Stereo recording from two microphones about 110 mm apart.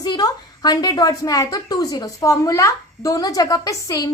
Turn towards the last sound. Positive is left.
turn(degrees=30)  # may be behind; listen again after turning